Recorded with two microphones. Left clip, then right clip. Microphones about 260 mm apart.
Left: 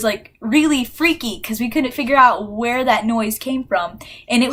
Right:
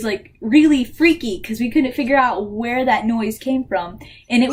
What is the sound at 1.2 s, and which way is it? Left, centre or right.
A woman's voice, left.